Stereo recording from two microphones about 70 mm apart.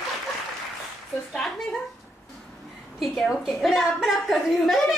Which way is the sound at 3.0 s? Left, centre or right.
Centre.